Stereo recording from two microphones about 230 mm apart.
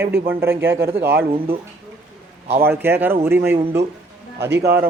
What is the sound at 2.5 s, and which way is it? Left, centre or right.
A man's voice, centre.